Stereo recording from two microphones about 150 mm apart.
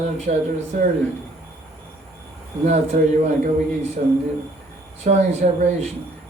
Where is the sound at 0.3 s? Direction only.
65° right (ahead or behind).